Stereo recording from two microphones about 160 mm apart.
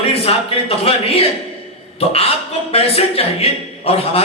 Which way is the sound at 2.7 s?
40° left (ahead or behind).